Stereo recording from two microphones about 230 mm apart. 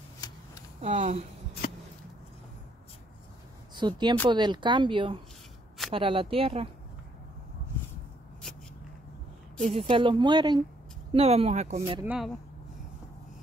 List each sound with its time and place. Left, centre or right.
0.7 s speech: right
3.7 s speech: centre
9.6 s speech: right
12.0 s speech: centre